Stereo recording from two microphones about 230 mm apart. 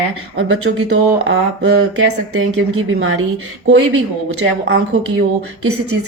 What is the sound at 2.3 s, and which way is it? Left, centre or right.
A woman's voice, right.